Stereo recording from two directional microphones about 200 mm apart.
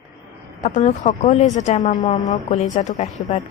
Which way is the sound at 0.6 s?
35° left (ahead or behind).